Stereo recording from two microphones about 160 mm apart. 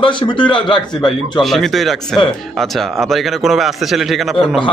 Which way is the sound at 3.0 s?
Centre (ahead or behind).